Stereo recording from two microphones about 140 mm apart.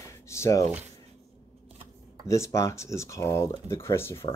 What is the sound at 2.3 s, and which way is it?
Speech, 20° left (ahead or behind).